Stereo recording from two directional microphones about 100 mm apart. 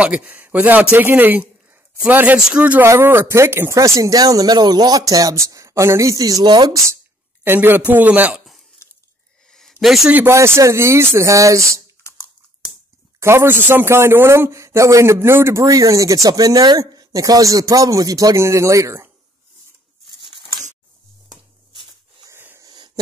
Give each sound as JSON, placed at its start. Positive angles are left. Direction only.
{"t": 0.0, "sound": "a man's voice", "side_deg": -15}
{"t": 2.8, "sound": "a man's voice", "side_deg": -25}
{"t": 7.4, "sound": "speech", "side_deg": -20}
{"t": 9.5, "sound": "a sound", "side_deg": 5}
{"t": 10.1, "sound": "speech", "side_deg": -25}
{"t": 13.2, "sound": "a man's voice", "side_deg": -25}
{"t": 22.3, "sound": "wheeze", "side_deg": -20}
{"t": 22.6, "sound": "a sound", "side_deg": -45}